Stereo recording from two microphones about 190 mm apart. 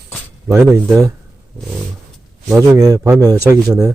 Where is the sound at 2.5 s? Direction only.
15° right (ahead or behind).